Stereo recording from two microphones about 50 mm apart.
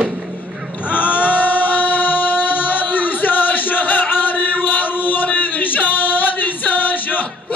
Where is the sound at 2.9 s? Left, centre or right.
Left.